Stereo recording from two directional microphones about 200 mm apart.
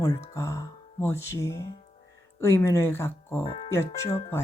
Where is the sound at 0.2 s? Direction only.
15° left (ahead or behind).